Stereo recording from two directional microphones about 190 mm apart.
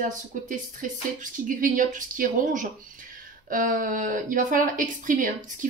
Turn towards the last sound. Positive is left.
turn(degrees=-45)  # may be behind; listen again after turning